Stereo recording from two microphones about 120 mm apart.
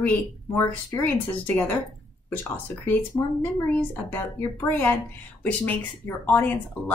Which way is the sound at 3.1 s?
20° left (ahead or behind).